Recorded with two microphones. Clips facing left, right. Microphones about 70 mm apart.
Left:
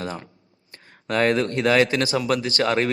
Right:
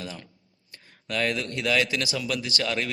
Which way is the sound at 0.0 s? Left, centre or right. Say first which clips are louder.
Left 7 dB; left.